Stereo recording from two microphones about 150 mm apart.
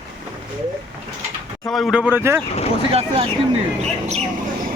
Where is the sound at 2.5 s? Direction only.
45° left (ahead or behind).